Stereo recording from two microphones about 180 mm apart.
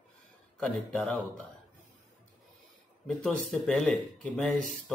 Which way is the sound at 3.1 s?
5° left (ahead or behind).